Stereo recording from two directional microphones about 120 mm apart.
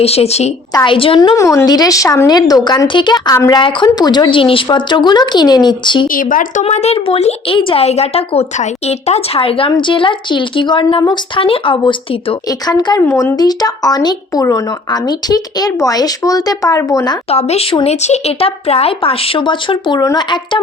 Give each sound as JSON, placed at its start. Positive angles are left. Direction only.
{"t": 0.0, "sound": "speech", "side_deg": 60}
{"t": 0.9, "sound": "a woman's voice", "side_deg": 50}
{"t": 1.4, "sound": "speech", "side_deg": 25}
{"t": 3.3, "sound": "speech", "side_deg": 25}
{"t": 6.6, "sound": "a woman's voice", "side_deg": 65}
{"t": 13.1, "sound": "speech", "side_deg": 20}
{"t": 13.4, "sound": "speech", "side_deg": 35}
{"t": 17.3, "sound": "speech", "side_deg": 60}